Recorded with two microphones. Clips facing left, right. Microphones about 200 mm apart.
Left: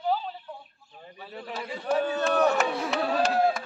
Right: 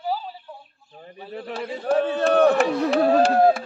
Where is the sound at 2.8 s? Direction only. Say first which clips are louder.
Right 9 dB; 50° right (ahead or behind).